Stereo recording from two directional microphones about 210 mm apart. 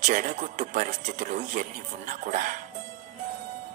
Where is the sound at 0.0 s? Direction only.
35° right (ahead or behind).